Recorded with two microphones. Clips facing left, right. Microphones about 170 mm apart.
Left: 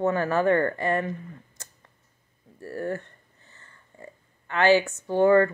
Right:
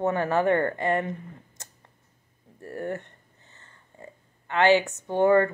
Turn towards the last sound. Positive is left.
turn(degrees=-20)  # may be behind; listen again after turning